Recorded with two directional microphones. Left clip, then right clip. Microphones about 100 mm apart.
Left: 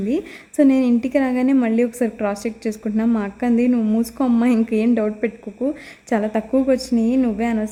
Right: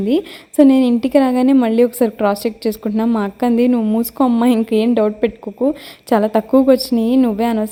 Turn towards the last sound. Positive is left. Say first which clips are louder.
# right 5 dB
turn(degrees=-45)  # may be behind; listen again after turning